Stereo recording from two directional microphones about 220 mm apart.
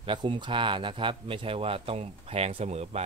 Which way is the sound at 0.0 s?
20° right (ahead or behind).